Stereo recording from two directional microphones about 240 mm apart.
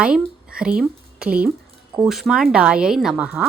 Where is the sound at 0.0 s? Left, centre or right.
Centre.